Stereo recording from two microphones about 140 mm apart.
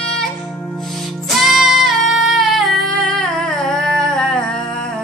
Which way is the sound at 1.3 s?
Centre (ahead or behind).